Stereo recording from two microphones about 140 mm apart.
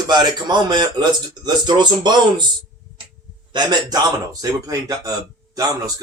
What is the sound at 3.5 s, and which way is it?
Speech, 30° right (ahead or behind).